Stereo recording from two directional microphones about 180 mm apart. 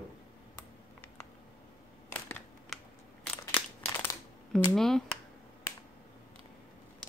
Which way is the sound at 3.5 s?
10° left (ahead or behind).